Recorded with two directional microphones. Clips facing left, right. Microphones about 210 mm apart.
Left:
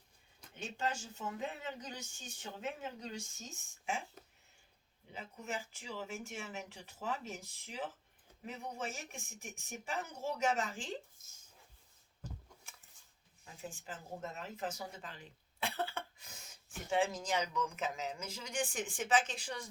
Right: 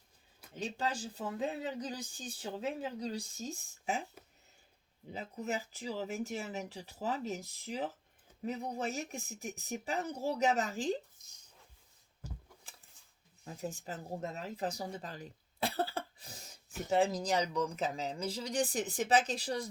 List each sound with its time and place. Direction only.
0.5 s speech: 35° right (ahead or behind)
4.2 s a sound: 10° right (ahead or behind)
5.1 s speech: 35° right (ahead or behind)
13.4 s speech: 40° right (ahead or behind)